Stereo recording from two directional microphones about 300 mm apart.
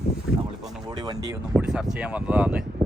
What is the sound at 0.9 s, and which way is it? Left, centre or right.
Speech, centre.